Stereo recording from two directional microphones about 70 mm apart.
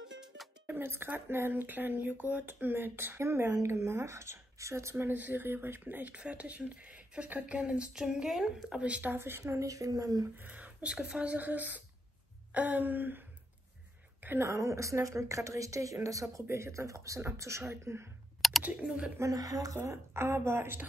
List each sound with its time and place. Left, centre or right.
0.7 s speech: right
9.1 s a woman's voice: right
9.5 s speech: right
10.3 s speech: right
14.4 s a woman's voice: right
18.6 s speech: centre
19.1 s speech: right
19.8 s a woman's voice: right